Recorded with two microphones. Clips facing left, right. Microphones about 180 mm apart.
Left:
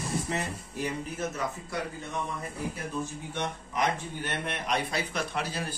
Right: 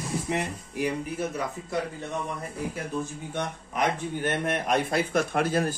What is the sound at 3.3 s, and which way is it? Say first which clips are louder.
Speech: right 2 dB; 50° right (ahead or behind).